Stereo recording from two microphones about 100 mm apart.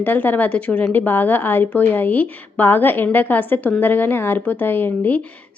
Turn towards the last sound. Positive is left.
turn(degrees=20)  # may be behind; listen again after turning